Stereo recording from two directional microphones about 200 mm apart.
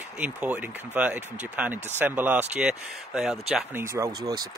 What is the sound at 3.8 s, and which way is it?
Speech, 15° right (ahead or behind).